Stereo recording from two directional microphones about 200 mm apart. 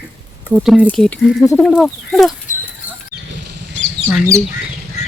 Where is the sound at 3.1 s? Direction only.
55° right (ahead or behind).